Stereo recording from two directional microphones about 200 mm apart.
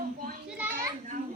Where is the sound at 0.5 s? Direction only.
10° right (ahead or behind).